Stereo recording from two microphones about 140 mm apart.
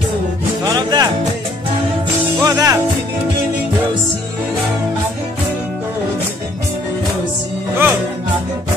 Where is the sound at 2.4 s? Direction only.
25° right (ahead or behind).